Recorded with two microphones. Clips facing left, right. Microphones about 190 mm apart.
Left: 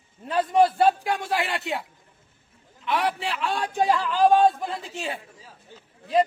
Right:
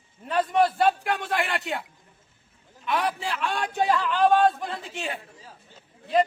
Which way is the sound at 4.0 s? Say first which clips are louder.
Left 2 dB; 30° left (ahead or behind).